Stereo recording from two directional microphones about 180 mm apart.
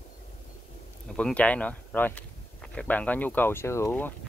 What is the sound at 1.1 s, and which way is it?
Speech, 5° left (ahead or behind).